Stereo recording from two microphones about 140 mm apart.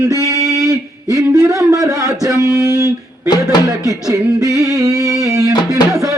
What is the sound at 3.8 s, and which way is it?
Music, 25° right (ahead or behind).